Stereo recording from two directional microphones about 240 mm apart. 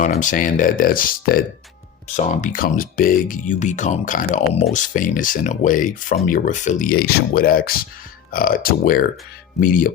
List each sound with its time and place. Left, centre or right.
0.0 s speech: left